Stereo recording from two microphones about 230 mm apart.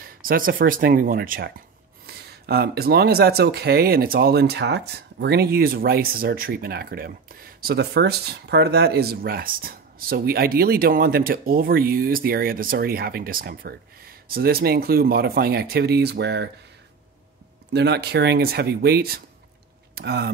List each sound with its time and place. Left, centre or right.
0.2 s speech: right
17.7 s speech: right